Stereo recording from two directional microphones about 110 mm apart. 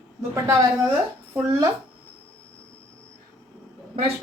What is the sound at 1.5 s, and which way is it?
Speech, 30° right (ahead or behind).